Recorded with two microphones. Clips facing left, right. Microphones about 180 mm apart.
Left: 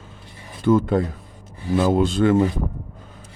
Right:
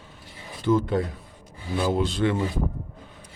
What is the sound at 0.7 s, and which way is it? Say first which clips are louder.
Speech: left 4 dB; 50° left (ahead or behind).